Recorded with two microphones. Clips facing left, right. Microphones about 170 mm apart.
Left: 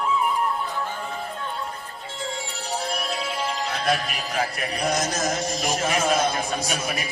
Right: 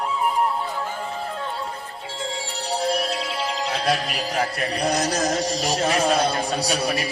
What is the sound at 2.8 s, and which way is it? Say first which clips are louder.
Speech: right 7 dB; 35° right (ahead or behind).